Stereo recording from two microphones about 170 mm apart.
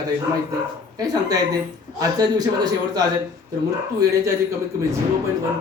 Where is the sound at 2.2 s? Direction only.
20° right (ahead or behind).